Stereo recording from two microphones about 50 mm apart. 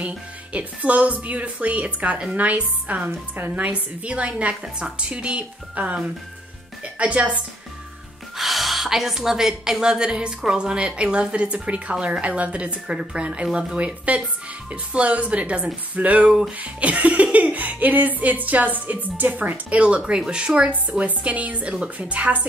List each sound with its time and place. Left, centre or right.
0.0 s a woman's voice: right
8.4 s a woman's voice: centre
13.7 s a woman's voice: right
16.3 s a woman's voice: centre
16.5 s a woman's voice: right